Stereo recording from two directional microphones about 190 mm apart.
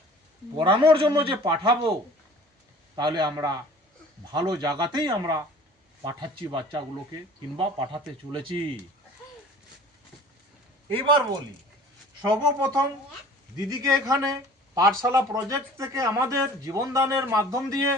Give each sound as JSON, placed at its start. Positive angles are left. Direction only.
{"t": 0.5, "sound": "speech", "side_deg": -25}
{"t": 2.9, "sound": "speech", "side_deg": -20}
{"t": 10.8, "sound": "speech", "side_deg": -25}